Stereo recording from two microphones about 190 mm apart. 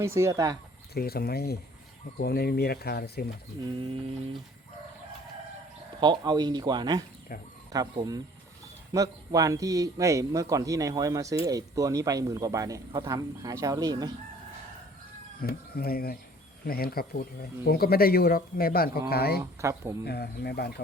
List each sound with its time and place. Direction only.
0.0 s speech: 15° right (ahead or behind)
0.9 s speech: 55° left (ahead or behind)
3.6 s speech: 25° right (ahead or behind)
6.0 s speech: 20° right (ahead or behind)
15.4 s speech: 50° left (ahead or behind)
19.4 s speech: 15° right (ahead or behind)
20.1 s speech: 55° left (ahead or behind)